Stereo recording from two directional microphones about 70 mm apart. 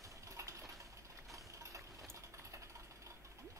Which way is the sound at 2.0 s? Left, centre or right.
Right.